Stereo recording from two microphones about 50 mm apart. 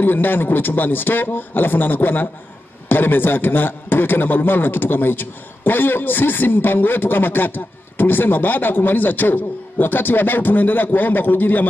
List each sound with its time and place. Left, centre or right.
0.0 s a man's voice: left